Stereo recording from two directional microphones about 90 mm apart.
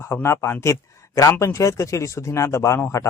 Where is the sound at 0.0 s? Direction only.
30° left (ahead or behind).